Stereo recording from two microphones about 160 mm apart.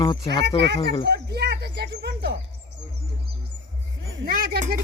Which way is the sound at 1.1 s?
90° right.